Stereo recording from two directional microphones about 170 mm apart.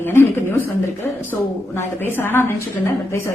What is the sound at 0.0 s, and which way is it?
Speech, 15° left (ahead or behind).